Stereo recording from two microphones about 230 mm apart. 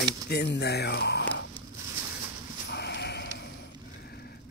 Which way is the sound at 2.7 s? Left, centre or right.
Left.